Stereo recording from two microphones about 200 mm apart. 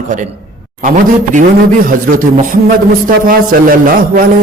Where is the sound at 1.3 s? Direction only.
45° right (ahead or behind).